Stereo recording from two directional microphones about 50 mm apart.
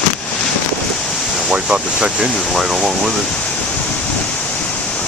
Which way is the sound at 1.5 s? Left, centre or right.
Centre.